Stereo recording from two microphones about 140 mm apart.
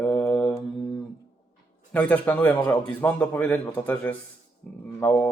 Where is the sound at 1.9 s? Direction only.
10° left (ahead or behind).